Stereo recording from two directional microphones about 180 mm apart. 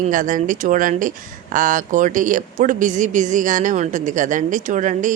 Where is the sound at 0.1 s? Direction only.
45° right (ahead or behind).